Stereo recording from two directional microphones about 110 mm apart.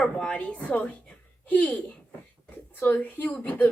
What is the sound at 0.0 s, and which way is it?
A woman's voice, 10° left (ahead or behind).